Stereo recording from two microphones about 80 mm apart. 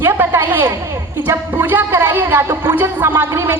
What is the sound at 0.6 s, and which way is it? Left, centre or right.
A child's voice, right.